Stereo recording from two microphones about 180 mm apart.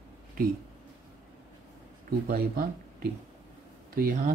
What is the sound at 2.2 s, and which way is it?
Speech, 55° right (ahead or behind).